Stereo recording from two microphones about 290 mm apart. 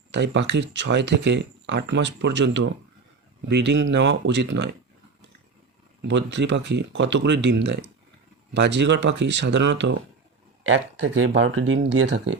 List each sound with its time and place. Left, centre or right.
0.1 s speech: right
6.0 s speech: right
11.2 s speech: right